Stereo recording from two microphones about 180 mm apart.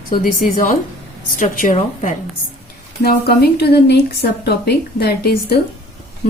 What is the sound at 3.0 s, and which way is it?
A woman's voice, 60° left (ahead or behind).